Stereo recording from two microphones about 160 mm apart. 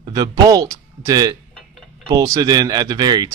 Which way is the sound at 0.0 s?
25° right (ahead or behind).